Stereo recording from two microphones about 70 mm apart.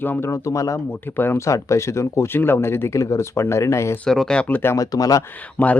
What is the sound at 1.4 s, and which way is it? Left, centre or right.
Speech, left.